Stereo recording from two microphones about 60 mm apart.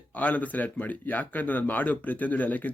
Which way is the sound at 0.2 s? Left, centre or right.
Left.